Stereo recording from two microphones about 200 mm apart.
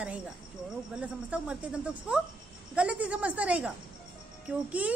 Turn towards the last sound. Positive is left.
turn(degrees=-5)  # may be behind; listen again after turning